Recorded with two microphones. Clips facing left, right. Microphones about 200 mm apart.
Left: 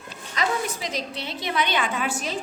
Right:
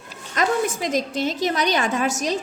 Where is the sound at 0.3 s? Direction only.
45° right (ahead or behind).